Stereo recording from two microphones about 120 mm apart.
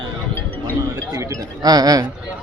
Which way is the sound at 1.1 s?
25° right (ahead or behind).